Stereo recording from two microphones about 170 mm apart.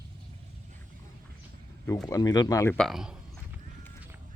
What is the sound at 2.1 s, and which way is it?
Speech, 20° left (ahead or behind).